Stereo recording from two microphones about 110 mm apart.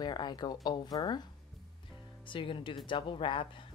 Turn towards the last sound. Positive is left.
turn(degrees=50)  # may be behind; listen again after turning